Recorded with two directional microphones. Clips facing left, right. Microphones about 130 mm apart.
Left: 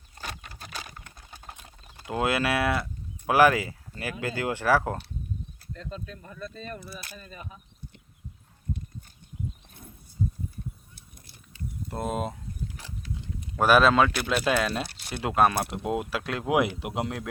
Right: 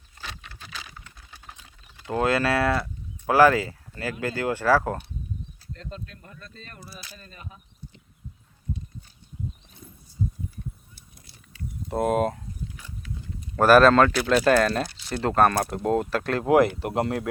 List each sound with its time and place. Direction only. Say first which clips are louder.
0.2 s sewing machine: left 1 dB; 45° left (ahead or behind)
2.2 s speech: right 3 dB; 15° left (ahead or behind)
6.9 s speech: left 2 dB; 55° left (ahead or behind)
11.9 s speech: right 8 dB; centre (ahead or behind)
13.6 s speech: right 4 dB; centre (ahead or behind)
14.8 s a sound: right 1 dB; 60° left (ahead or behind)
15.2 s speech: right 2 dB; 5° left (ahead or behind)